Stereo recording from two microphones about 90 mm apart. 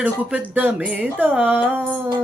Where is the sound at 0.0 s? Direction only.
15° right (ahead or behind).